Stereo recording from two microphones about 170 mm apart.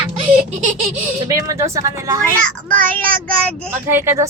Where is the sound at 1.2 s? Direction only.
20° right (ahead or behind).